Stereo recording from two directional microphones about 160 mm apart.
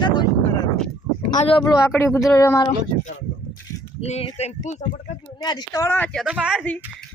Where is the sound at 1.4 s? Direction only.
35° left (ahead or behind).